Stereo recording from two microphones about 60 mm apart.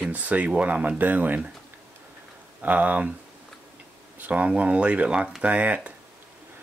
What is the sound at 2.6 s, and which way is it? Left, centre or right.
Speech, right.